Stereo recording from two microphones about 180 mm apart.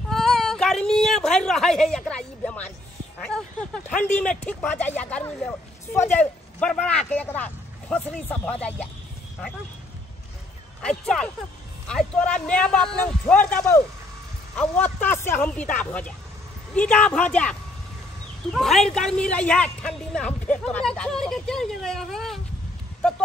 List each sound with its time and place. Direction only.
0.1 s a sound: centre (ahead or behind)
3.2 s a man's voice: 5° left (ahead or behind)
10.8 s a man's voice: 5° left (ahead or behind)